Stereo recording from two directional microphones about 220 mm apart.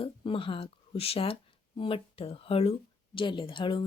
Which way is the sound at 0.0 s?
25° left (ahead or behind).